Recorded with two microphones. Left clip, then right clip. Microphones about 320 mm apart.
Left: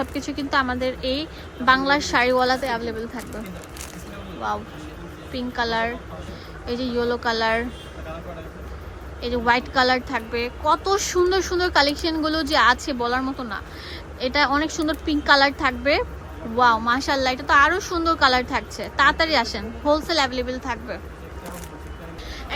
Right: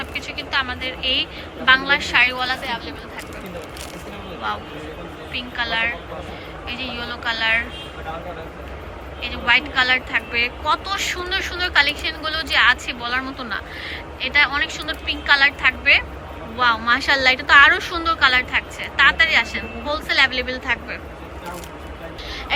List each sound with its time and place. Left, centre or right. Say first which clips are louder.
0.0 s a woman's voice: even; left
5.3 s a woman's voice: right 1 dB; centre
9.2 s speech: right 2 dB; centre